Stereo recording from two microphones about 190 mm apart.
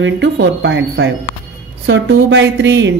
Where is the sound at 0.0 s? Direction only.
75° right (ahead or behind).